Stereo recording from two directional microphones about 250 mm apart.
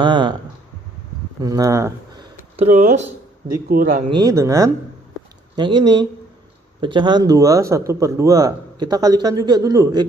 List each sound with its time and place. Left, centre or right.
0.0 s a sound: centre
1.4 s speech: centre
2.5 s speech: right
4.1 s a man's voice: centre